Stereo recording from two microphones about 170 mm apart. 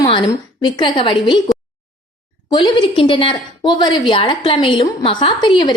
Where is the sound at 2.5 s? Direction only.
25° left (ahead or behind).